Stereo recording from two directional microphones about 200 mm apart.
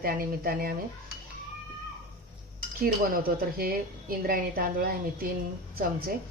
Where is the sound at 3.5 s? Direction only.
45° right (ahead or behind).